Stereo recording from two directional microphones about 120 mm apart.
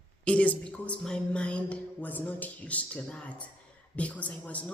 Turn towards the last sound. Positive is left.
turn(degrees=10)  # may be behind; listen again after turning